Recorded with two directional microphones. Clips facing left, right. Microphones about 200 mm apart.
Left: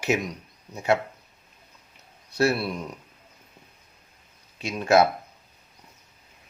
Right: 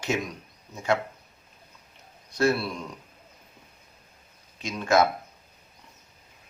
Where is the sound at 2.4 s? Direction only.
25° left (ahead or behind).